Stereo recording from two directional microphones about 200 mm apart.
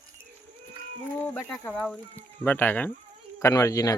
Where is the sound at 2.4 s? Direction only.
10° left (ahead or behind).